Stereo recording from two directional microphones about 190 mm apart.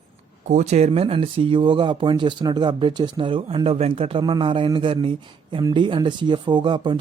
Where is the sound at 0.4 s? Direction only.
40° right (ahead or behind).